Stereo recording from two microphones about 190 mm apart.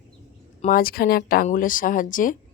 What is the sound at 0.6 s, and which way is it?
A woman's voice, 50° left (ahead or behind).